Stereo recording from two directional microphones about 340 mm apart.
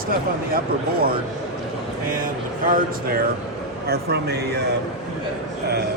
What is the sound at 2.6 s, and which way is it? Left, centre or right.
Speech, right.